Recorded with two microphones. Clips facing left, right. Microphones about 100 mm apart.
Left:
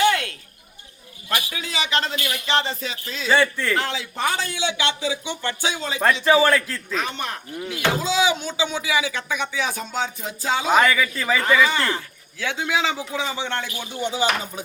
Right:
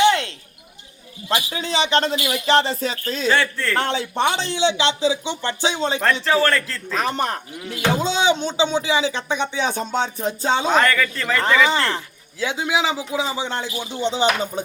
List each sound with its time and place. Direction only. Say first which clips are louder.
0.0 s basketball bounce: right 3 dB; 25° right (ahead or behind)
1.3 s speech: right 4 dB; 25° right (ahead or behind)
2.1 s speech: right 5 dB; 20° right (ahead or behind)
2.5 s speech: right 6 dB; 35° right (ahead or behind)
3.2 s a man's voice: left 1 dB; 5° left (ahead or behind)
3.8 s speech: right 4 dB; 35° right (ahead or behind)
6.2 s a man's voice: left 5 dB; 10° left (ahead or behind)
6.9 s speech: right 5 dB; 40° right (ahead or behind)
7.8 s speech: right 1 dB; 30° right (ahead or behind)
10.7 s speech: left 3 dB; 5° left (ahead or behind)
11.9 s a man's voice: right 5 dB; 20° right (ahead or behind)